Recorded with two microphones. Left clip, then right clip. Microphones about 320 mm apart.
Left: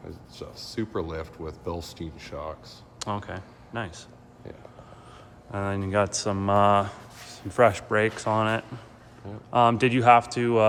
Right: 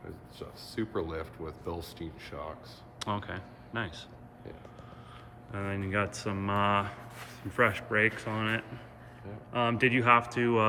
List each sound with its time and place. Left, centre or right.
0.3 s speech: left
3.0 s speech: centre
5.5 s speech: centre